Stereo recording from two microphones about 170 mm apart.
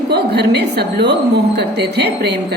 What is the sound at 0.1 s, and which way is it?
A woman's voice, 75° right (ahead or behind).